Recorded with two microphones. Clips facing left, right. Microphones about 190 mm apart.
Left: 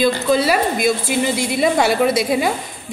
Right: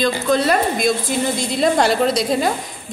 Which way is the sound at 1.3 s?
65° left (ahead or behind).